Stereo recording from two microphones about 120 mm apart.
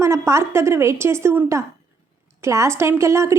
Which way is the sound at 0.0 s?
25° right (ahead or behind).